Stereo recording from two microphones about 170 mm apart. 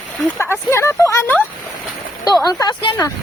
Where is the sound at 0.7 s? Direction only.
15° left (ahead or behind).